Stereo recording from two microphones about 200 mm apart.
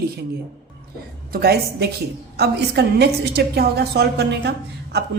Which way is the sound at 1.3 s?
50° right (ahead or behind).